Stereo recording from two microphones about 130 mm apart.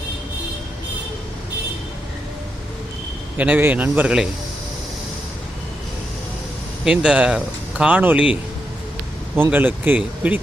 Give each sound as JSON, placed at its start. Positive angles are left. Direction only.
{"t": 3.3, "sound": "speech", "side_deg": -10}
{"t": 6.8, "sound": "speech", "side_deg": -5}